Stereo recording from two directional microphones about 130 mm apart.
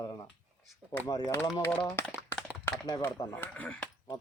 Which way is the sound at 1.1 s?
30° left (ahead or behind).